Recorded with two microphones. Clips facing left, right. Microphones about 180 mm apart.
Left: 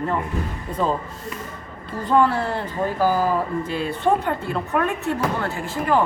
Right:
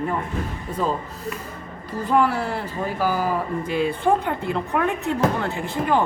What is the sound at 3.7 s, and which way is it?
A woman's voice, 15° right (ahead or behind).